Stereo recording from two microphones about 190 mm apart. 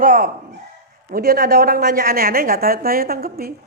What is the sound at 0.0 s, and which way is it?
A woman's voice, 50° right (ahead or behind).